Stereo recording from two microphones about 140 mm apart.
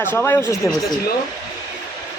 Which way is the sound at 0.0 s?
15° left (ahead or behind).